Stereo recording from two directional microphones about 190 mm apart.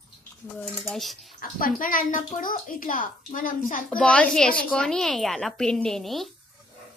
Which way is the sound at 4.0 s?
5° left (ahead or behind).